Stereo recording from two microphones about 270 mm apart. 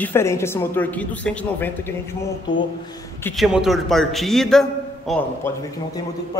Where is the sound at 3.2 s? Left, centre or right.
Centre.